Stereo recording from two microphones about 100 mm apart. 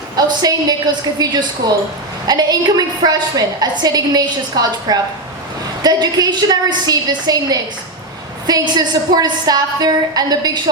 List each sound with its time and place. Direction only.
0.2 s a woman's voice: 40° right (ahead or behind)